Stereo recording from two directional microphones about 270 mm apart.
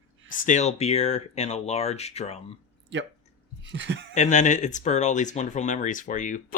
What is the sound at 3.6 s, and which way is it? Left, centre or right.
Speech, right.